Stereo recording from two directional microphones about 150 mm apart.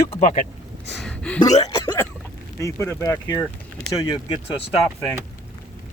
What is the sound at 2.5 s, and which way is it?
Speech, 20° left (ahead or behind).